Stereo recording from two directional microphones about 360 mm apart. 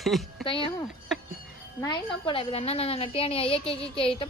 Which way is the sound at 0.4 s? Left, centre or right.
Centre.